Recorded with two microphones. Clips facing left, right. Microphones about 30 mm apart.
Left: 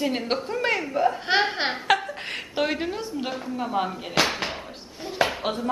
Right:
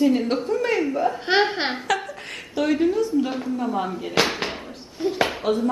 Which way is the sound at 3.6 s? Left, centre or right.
Centre.